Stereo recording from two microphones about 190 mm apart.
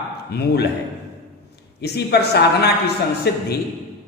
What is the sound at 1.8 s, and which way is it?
A man's voice, 60° left (ahead or behind).